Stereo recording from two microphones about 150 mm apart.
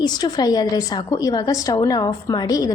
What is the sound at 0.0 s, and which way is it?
A woman's voice, 25° left (ahead or behind).